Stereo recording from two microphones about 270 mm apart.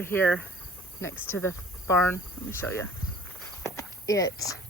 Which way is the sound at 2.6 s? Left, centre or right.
Centre.